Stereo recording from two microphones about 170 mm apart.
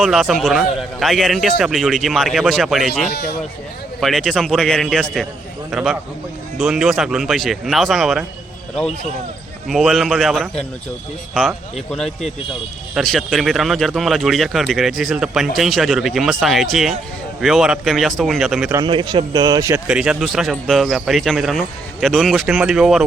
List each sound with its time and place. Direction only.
0.0 s a man's voice: centre (ahead or behind)
9.6 s a man's voice: centre (ahead or behind)
18.7 s a man's voice: 25° right (ahead or behind)
19.9 s a man's voice: 5° right (ahead or behind)